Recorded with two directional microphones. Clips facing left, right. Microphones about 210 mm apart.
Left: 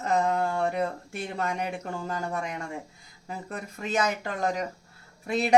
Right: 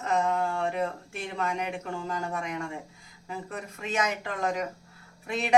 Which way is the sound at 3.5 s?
40° left (ahead or behind).